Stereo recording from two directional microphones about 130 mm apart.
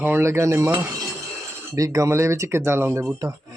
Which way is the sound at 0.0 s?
20° right (ahead or behind).